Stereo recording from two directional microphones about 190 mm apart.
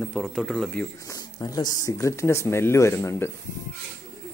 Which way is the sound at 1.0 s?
20° left (ahead or behind).